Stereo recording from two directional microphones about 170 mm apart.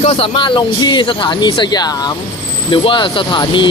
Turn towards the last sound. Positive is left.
turn(degrees=30)  # may be behind; listen again after turning